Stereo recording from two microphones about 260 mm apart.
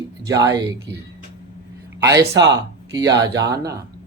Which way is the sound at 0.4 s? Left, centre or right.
Centre.